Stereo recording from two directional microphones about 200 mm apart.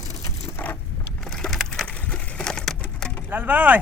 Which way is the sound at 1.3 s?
Centre (ahead or behind).